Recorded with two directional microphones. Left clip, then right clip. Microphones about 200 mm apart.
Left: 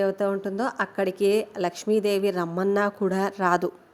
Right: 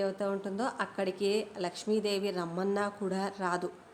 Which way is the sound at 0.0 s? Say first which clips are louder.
Left 8 dB; 35° left (ahead or behind).